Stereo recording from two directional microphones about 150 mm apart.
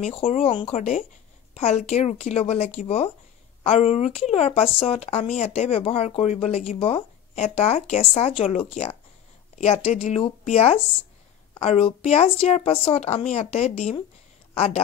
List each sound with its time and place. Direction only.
0.0 s speech: 40° left (ahead or behind)